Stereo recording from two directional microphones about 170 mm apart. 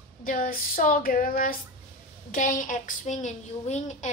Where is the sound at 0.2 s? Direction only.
55° left (ahead or behind).